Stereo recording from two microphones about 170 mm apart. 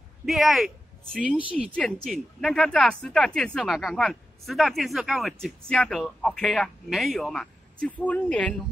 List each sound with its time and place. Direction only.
0.2 s speech: centre (ahead or behind)